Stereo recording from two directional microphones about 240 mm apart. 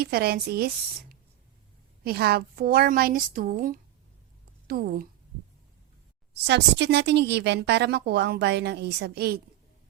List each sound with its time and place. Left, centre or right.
0.0 s a woman's voice: right
2.0 s a woman's voice: right
6.3 s a woman's voice: right